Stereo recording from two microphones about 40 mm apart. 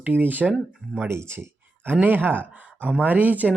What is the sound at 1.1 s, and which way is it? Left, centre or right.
Speech, right.